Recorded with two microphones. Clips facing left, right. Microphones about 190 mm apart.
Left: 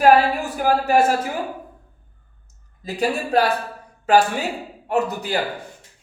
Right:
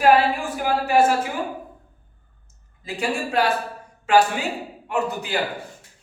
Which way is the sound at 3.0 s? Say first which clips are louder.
Left 3 dB; 40° left (ahead or behind).